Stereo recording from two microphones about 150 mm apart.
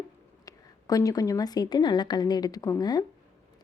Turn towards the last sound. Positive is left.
turn(degrees=25)  # may be behind; listen again after turning